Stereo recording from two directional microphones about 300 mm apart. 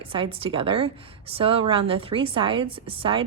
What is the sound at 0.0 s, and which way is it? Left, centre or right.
A woman's voice, centre.